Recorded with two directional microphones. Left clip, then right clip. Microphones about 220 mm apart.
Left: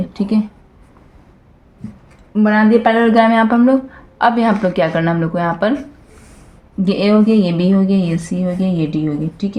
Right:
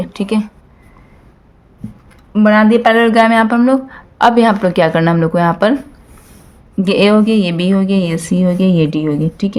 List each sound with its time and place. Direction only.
0.1 s speech: 45° right (ahead or behind)
2.3 s speech: 35° right (ahead or behind)
6.8 s speech: 45° right (ahead or behind)